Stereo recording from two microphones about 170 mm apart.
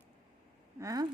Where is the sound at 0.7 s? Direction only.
20° right (ahead or behind).